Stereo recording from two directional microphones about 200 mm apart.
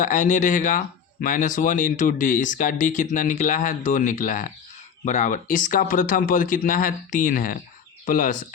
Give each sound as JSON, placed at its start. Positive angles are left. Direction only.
{"t": 0.0, "sound": "speech", "side_deg": 40}